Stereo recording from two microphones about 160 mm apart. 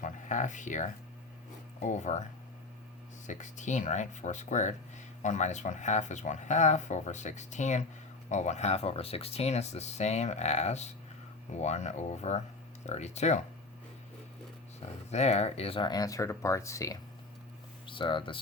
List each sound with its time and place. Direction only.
0.0 s speech: 50° left (ahead or behind)
3.2 s speech: 50° left (ahead or behind)
14.8 s speech: 45° left (ahead or behind); by 17.0 s 20° left (ahead or behind)
17.8 s speech: 30° left (ahead or behind)